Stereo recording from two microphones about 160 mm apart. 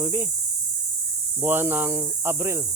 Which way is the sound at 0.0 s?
15° right (ahead or behind).